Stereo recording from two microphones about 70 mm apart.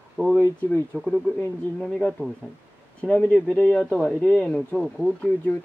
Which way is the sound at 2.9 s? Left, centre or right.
Centre.